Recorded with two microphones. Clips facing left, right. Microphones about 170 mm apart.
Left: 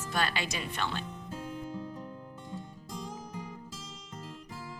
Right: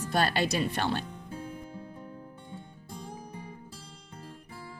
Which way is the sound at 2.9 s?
90° left.